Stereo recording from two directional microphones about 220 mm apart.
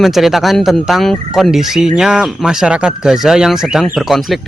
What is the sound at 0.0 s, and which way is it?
Speech, centre (ahead or behind).